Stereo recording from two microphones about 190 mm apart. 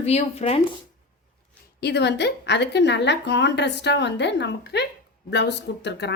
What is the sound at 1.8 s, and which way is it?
A woman's voice, 60° left (ahead or behind).